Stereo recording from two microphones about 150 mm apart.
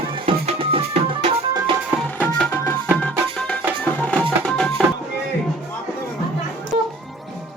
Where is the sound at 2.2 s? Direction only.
15° left (ahead or behind).